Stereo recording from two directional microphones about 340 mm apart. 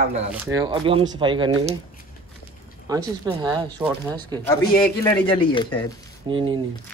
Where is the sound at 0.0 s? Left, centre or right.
Centre.